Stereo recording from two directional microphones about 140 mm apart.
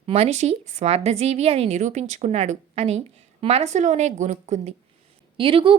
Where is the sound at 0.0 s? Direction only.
45° right (ahead or behind).